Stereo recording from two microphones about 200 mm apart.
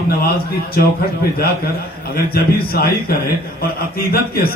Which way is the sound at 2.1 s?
50° left (ahead or behind).